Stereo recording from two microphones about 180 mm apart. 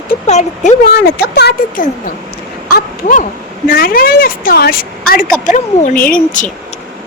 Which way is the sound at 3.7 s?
55° left (ahead or behind).